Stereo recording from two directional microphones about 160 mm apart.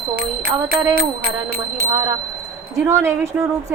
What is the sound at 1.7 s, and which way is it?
A woman's voice, 20° right (ahead or behind).